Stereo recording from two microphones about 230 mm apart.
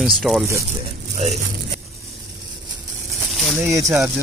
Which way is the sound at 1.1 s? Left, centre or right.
Right.